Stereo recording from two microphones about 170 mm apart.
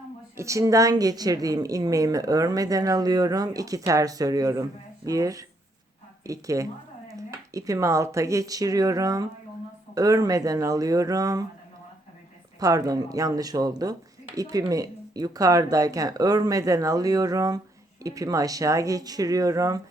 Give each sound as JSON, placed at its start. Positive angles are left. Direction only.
{"t": 0.3, "sound": "a woman's voice", "side_deg": -20}
{"t": 12.5, "sound": "a woman's voice", "side_deg": -20}